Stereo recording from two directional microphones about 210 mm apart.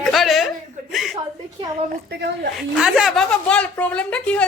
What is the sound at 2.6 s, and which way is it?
A woman's voice, 5° right (ahead or behind).